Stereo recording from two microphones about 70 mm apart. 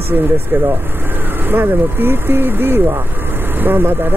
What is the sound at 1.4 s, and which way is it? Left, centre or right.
Speech, right.